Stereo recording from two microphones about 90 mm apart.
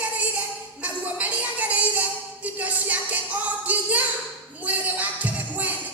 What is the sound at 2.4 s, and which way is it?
Music, 15° right (ahead or behind).